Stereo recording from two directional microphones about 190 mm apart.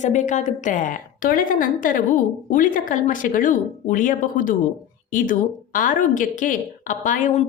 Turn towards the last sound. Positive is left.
turn(degrees=40)  # may be behind; listen again after turning